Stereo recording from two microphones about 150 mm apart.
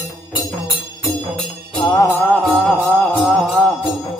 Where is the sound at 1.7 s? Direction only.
30° left (ahead or behind).